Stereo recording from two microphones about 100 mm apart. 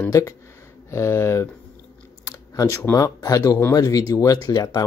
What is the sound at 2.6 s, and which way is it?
Speech, 30° left (ahead or behind).